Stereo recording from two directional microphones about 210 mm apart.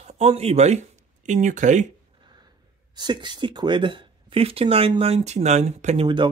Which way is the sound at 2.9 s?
20° right (ahead or behind).